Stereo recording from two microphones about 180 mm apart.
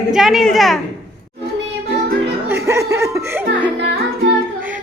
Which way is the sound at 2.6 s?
15° right (ahead or behind).